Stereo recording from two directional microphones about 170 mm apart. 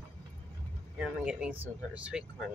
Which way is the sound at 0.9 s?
5° right (ahead or behind).